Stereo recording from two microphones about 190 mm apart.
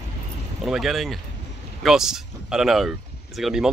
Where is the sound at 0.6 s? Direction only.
Centre (ahead or behind).